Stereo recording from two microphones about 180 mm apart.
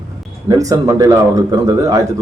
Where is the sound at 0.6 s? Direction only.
20° right (ahead or behind).